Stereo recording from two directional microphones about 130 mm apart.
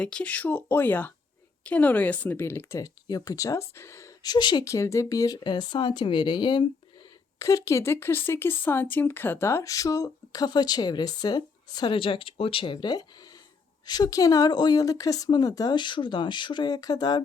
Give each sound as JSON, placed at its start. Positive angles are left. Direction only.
{"t": 0.0, "sound": "a woman's voice", "side_deg": 10}
{"t": 7.3, "sound": "a woman's voice", "side_deg": 25}